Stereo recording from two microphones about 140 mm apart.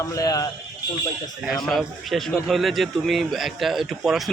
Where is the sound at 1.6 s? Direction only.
Centre (ahead or behind).